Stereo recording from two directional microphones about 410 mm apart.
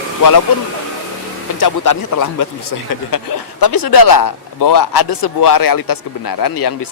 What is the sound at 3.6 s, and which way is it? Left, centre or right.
A man's voice, left.